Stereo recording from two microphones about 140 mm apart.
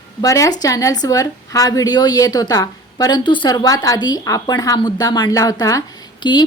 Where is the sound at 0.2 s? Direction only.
25° left (ahead or behind).